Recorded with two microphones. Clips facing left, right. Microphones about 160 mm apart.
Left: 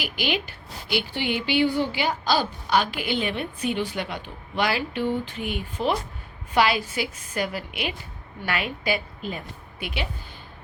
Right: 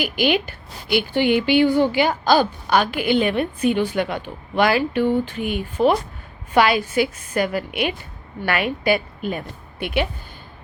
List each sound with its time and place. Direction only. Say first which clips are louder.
0.0 s a woman's voice: right 8 dB; 50° right (ahead or behind)